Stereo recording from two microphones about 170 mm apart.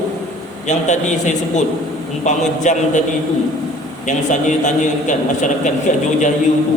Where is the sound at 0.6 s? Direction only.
45° left (ahead or behind).